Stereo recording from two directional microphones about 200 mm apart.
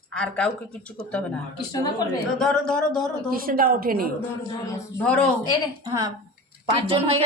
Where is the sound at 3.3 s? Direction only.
45° right (ahead or behind).